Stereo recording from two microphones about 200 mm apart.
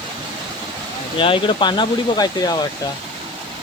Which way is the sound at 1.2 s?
25° left (ahead or behind).